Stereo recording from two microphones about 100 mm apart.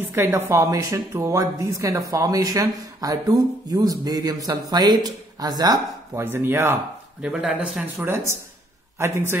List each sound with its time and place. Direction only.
0.1 s a woman's voice: 25° right (ahead or behind); by 5.8 s 40° right (ahead or behind)
6.1 s speech: 25° right (ahead or behind)
7.2 s speech: 10° right (ahead or behind)
8.0 s speech: 25° right (ahead or behind)